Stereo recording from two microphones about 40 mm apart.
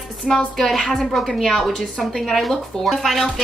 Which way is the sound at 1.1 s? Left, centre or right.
Centre.